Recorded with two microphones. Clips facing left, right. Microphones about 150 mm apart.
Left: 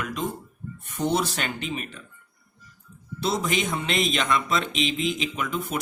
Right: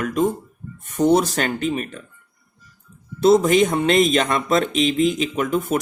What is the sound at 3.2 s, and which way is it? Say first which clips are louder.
Speech: right 12 dB; 45° right (ahead or behind).